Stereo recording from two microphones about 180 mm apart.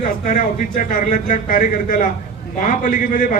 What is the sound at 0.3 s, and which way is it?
A man's voice, 50° left (ahead or behind).